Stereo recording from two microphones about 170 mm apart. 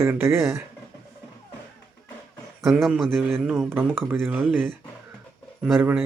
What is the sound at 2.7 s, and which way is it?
Speech, centre (ahead or behind).